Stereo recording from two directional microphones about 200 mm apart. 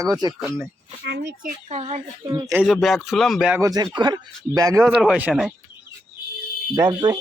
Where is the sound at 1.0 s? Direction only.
55° right (ahead or behind).